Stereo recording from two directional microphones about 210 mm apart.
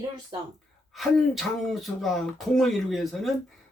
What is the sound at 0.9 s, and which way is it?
Speech, centre (ahead or behind).